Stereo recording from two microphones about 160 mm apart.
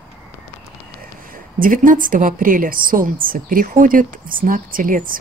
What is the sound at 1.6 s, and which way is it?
Speech, 55° right (ahead or behind).